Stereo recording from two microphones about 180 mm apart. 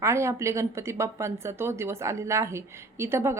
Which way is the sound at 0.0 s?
15° right (ahead or behind).